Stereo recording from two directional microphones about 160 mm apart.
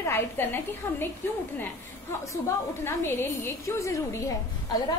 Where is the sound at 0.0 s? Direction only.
15° left (ahead or behind).